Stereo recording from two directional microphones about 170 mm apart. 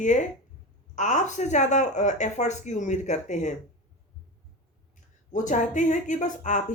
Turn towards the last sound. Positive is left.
turn(degrees=50)  # may be behind; listen again after turning